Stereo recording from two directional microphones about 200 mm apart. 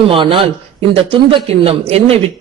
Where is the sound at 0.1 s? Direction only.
25° right (ahead or behind).